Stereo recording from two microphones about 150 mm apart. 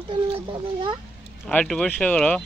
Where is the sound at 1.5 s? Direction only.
5° left (ahead or behind).